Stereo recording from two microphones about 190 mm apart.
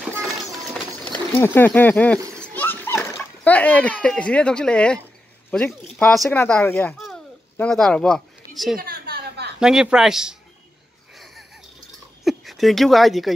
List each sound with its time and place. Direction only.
1.1 s speech: 10° left (ahead or behind)
2.4 s splash: 10° left (ahead or behind)
5.5 s speech: 5° left (ahead or behind)
8.7 s a sound: 50° right (ahead or behind)
9.6 s speech: 5° right (ahead or behind)
11.1 s a sound: centre (ahead or behind)
12.3 s speech: centre (ahead or behind)